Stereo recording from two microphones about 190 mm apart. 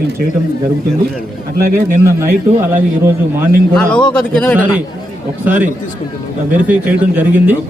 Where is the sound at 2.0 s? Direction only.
15° right (ahead or behind).